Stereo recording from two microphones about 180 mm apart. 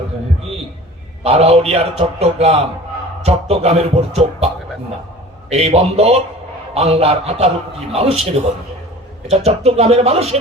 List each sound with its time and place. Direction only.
1.2 s a man's voice: 35° right (ahead or behind)
5.5 s a man's voice: 35° right (ahead or behind)